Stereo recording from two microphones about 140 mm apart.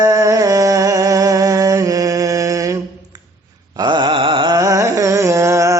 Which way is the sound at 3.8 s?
35° right (ahead or behind).